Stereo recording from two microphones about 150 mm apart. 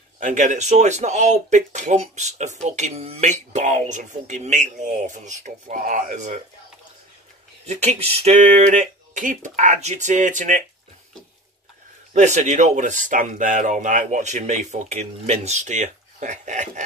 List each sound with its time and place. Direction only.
0.2 s speech: 55° right (ahead or behind)
7.6 s speech: 50° right (ahead or behind)
12.1 s speech: 50° right (ahead or behind)